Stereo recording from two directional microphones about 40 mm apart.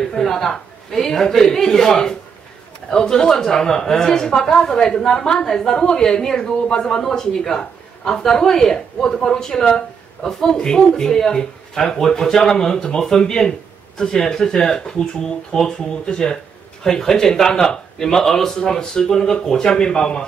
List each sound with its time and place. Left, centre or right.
0.1 s speech: centre
16.8 s speech: centre